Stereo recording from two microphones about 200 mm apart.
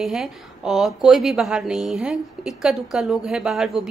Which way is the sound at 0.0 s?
Centre (ahead or behind).